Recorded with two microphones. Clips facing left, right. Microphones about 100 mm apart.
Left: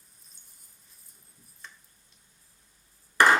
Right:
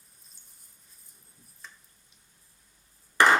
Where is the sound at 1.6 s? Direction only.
Centre (ahead or behind).